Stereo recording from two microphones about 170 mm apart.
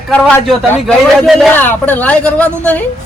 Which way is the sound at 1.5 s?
10° left (ahead or behind).